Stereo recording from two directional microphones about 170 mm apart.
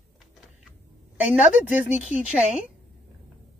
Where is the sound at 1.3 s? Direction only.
10° right (ahead or behind).